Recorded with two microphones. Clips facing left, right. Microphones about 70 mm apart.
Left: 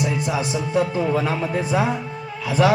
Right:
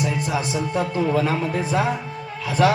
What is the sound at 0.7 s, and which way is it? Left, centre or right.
A man's voice, centre.